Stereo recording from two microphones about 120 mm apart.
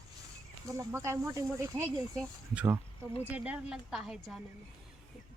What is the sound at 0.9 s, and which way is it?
Speech, 25° right (ahead or behind).